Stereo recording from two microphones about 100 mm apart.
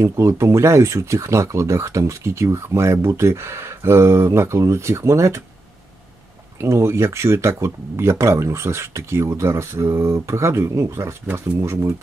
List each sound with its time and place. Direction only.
0.0 s speech: 25° right (ahead or behind)
6.6 s speech: 25° right (ahead or behind)